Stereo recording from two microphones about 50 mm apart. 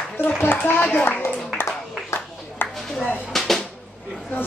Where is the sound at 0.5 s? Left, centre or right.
Left.